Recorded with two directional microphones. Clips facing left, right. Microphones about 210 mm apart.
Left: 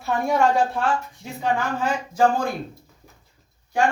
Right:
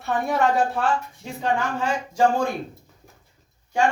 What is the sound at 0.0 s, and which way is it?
Speech, centre (ahead or behind).